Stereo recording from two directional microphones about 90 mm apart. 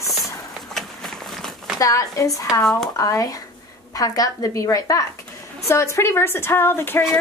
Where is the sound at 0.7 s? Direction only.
5° left (ahead or behind).